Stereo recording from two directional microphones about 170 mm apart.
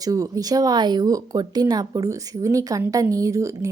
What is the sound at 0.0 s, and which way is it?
A woman's voice, 20° right (ahead or behind).